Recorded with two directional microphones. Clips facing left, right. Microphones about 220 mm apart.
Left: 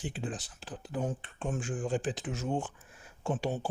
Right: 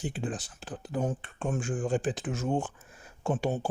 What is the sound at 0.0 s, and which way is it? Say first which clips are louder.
Speech: right 3 dB; 50° right (ahead or behind).